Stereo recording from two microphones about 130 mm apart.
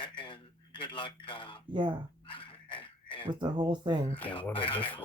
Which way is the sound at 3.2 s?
35° right (ahead or behind).